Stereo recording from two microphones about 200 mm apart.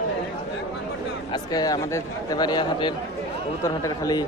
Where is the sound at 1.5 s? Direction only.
20° left (ahead or behind).